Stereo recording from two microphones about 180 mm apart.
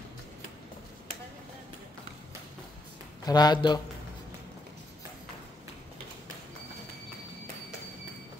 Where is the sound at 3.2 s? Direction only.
20° left (ahead or behind).